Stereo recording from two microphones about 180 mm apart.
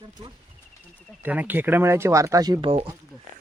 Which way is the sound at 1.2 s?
10° right (ahead or behind).